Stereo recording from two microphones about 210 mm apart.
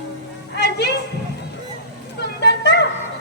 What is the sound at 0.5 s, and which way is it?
Music, 50° left (ahead or behind).